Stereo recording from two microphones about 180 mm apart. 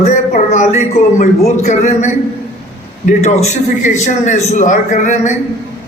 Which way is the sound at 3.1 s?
40° left (ahead or behind).